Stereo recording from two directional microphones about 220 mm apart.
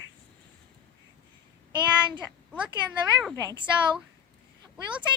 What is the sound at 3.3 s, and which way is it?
Speech, 15° right (ahead or behind).